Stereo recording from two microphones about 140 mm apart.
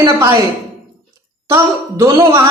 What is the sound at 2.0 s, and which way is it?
Speech, 20° right (ahead or behind).